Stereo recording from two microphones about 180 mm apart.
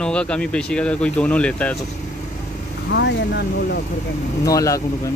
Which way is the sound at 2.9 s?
75° left (ahead or behind).